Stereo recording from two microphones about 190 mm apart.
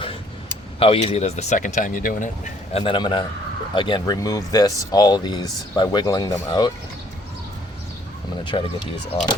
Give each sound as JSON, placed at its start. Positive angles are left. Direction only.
{"t": 0.8, "sound": "speech", "side_deg": 30}
{"t": 2.8, "sound": "speech", "side_deg": 25}
{"t": 8.5, "sound": "speech", "side_deg": 25}